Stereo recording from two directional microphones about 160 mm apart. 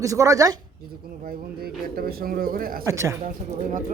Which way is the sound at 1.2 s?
70° right (ahead or behind).